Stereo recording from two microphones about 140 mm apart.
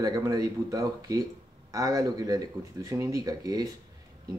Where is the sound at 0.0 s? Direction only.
25° right (ahead or behind).